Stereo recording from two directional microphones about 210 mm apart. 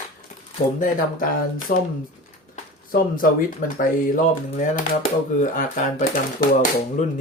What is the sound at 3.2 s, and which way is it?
Speech, 40° left (ahead or behind).